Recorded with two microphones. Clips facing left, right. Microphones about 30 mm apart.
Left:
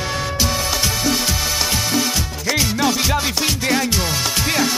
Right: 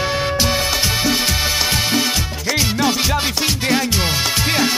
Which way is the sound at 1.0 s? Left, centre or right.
Centre.